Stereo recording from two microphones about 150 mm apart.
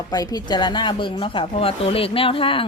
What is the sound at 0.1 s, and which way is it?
Speech, 25° left (ahead or behind).